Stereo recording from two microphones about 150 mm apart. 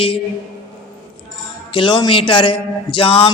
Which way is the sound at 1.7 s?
30° left (ahead or behind).